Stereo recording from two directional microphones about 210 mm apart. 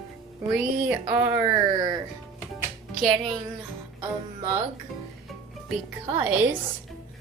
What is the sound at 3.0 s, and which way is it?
Music, centre (ahead or behind).